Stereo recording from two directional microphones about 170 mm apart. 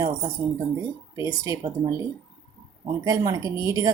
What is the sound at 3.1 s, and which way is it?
Speech, 20° right (ahead or behind).